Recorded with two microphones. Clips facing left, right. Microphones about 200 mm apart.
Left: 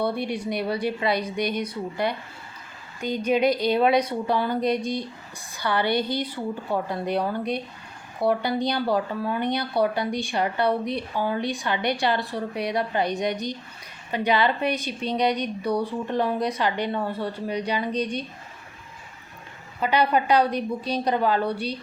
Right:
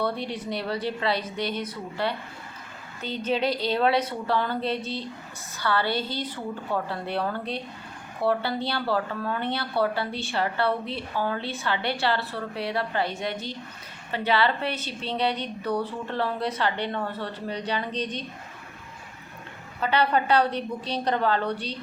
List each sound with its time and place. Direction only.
0.0 s speech: 10° left (ahead or behind)
19.8 s speech: 10° left (ahead or behind)